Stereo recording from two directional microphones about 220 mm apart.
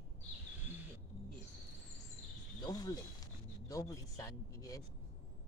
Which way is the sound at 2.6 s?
15° left (ahead or behind).